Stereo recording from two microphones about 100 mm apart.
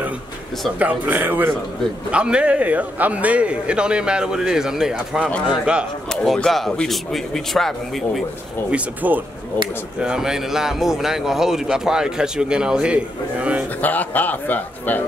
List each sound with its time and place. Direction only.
0.7 s a man's voice: 15° right (ahead or behind)
6.0 s speech: 5° left (ahead or behind)
8.6 s a man's voice: 15° right (ahead or behind)
13.7 s a man's voice: 20° left (ahead or behind)